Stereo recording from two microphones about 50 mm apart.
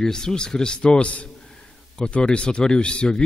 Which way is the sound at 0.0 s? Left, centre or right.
Centre.